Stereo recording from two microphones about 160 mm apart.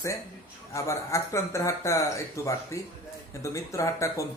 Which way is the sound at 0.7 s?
20° left (ahead or behind).